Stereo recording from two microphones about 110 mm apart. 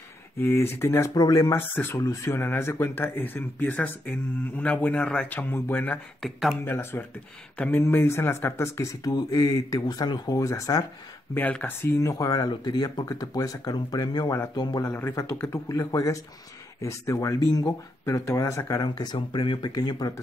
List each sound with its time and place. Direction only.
0.4 s speech: 20° left (ahead or behind)
1.1 s speech: 35° left (ahead or behind)
1.6 s speech: 15° left (ahead or behind)
2.0 s speech: 30° left (ahead or behind)
11.3 s speech: 15° left (ahead or behind)
12.0 s speech: 30° left (ahead or behind)
14.8 s speech: 20° left (ahead or behind); by 20.2 s 35° left (ahead or behind)